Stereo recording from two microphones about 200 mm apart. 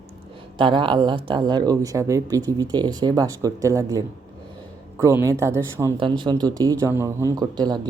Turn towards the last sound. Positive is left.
turn(degrees=-20)  # may be behind; listen again after turning